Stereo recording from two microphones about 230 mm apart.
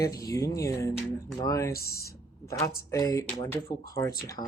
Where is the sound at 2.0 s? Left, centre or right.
Centre.